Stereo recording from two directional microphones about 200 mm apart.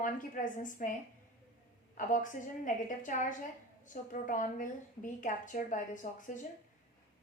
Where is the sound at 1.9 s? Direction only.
40° left (ahead or behind).